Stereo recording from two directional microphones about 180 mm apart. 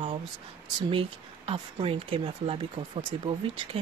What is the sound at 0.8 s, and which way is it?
Speech, 30° right (ahead or behind).